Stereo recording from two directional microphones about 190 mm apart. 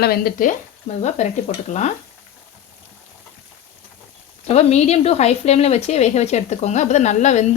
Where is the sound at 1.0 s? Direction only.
35° left (ahead or behind).